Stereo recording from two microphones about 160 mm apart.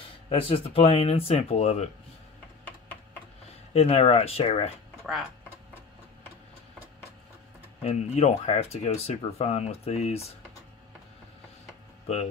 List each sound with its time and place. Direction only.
0.3 s speech: 35° left (ahead or behind)
3.7 s speech: 40° left (ahead or behind)
7.8 s speech: 45° left (ahead or behind)